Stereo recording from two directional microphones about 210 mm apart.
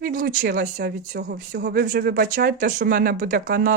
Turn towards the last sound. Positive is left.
turn(degrees=-40)  # may be behind; listen again after turning